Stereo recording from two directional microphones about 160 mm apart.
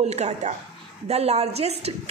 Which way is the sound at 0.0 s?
45° right (ahead or behind).